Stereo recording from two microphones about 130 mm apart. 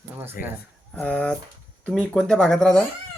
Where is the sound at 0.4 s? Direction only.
90° left.